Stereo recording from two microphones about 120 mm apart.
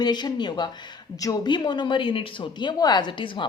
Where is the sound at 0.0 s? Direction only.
35° left (ahead or behind).